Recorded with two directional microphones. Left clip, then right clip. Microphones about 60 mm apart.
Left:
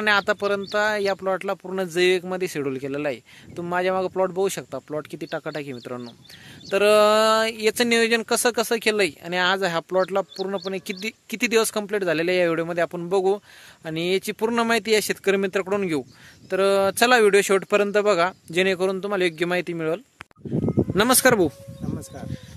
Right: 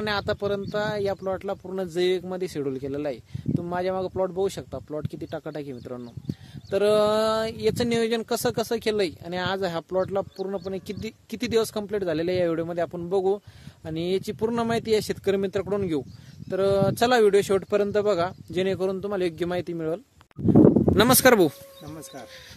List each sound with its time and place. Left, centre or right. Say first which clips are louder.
0.0 s speech: left 6 dB; left
5.4 s speech: left 4 dB; left
6.7 s speech: left 4 dB; left
20.9 s speech: even; centre